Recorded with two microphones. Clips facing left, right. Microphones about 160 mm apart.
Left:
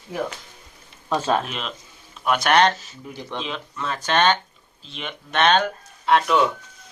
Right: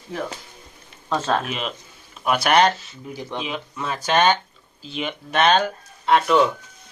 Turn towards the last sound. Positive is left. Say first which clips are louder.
# right 2 dB
turn(degrees=0)  # may be behind; listen again after turning